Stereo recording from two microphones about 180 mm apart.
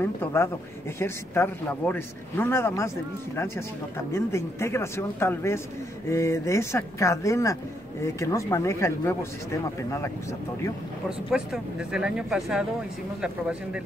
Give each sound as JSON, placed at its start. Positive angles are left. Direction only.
{"t": 0.0, "sound": "speech", "side_deg": 15}
{"t": 11.1, "sound": "speech", "side_deg": -5}